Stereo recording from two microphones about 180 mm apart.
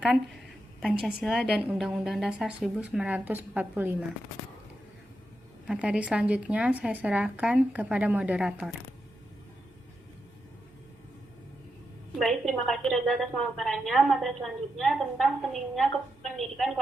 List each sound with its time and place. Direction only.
1.2 s a woman's voice: centre (ahead or behind)
5.6 s speech: 5° right (ahead or behind)
12.2 s a woman's voice: centre (ahead or behind)